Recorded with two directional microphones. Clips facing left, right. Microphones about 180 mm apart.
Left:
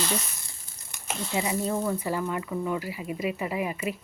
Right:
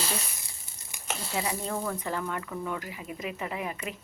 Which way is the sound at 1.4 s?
10° left (ahead or behind).